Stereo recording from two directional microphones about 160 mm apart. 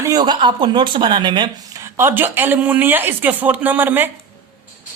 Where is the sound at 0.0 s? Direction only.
25° right (ahead or behind).